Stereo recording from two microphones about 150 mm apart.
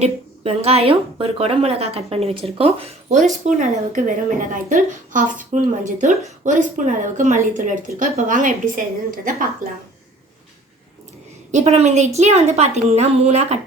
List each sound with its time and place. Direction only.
0.0 s a woman's voice: 40° right (ahead or behind); by 9.8 s 65° right (ahead or behind)
11.5 s a woman's voice: 45° right (ahead or behind)